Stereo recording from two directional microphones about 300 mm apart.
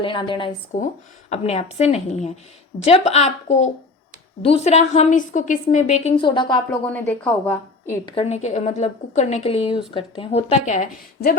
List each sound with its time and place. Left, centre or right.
0.0 s a woman's voice: centre
6.8 s a woman's voice: centre
8.1 s a woman's voice: left